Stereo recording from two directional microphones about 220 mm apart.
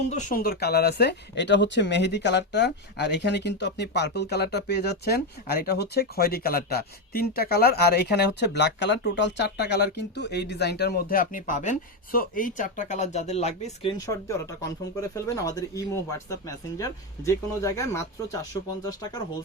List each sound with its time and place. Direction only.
0.1 s speech: 35° left (ahead or behind)
14.0 s speech: 15° left (ahead or behind)